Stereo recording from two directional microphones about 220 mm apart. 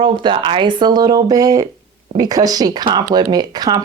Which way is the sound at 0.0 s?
20° right (ahead or behind).